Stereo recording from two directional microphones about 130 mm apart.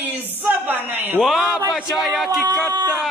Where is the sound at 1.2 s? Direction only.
Centre (ahead or behind).